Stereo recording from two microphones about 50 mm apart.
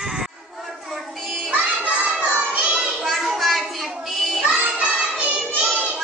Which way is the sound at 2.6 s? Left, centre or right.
Centre.